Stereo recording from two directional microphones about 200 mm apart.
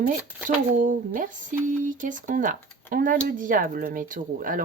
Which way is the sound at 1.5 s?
40° right (ahead or behind).